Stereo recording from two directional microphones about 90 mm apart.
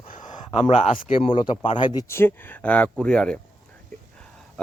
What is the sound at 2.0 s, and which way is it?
Speech, 25° left (ahead or behind).